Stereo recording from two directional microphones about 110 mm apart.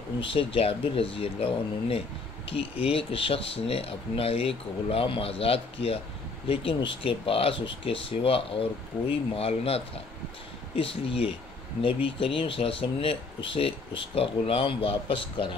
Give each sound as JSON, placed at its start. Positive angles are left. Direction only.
{"t": 0.2, "sound": "speech", "side_deg": 55}